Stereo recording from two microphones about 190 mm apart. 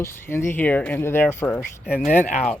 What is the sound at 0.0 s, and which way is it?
Speech, 10° left (ahead or behind).